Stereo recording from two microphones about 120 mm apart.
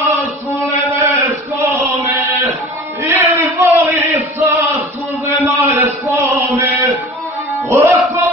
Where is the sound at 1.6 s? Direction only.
15° right (ahead or behind).